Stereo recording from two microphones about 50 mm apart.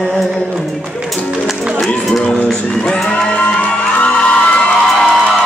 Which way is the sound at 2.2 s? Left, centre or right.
Centre.